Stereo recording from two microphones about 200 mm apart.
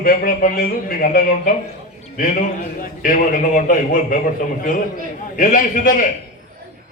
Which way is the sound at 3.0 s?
45° left (ahead or behind).